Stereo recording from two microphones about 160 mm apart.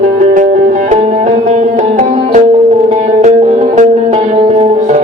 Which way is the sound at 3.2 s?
50° right (ahead or behind).